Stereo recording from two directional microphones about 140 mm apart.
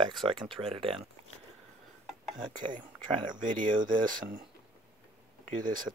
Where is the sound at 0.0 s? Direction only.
40° right (ahead or behind).